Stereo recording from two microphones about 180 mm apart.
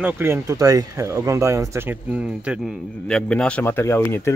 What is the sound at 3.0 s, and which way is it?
Speech, 5° left (ahead or behind).